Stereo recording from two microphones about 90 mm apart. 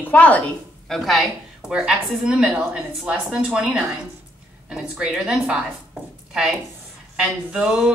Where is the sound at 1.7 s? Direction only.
10° right (ahead or behind).